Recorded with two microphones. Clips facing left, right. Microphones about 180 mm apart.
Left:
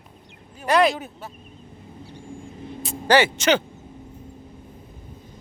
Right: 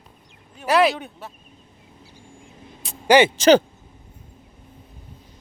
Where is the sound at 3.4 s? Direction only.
35° right (ahead or behind).